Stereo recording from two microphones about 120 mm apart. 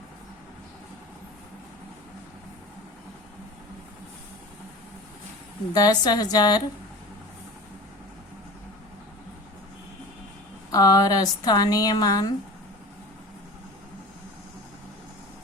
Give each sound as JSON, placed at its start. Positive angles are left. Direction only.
{"t": 5.7, "sound": "speech", "side_deg": 35}
{"t": 10.7, "sound": "speech", "side_deg": 30}